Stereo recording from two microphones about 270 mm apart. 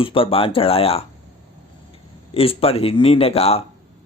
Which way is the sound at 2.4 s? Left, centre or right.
Left.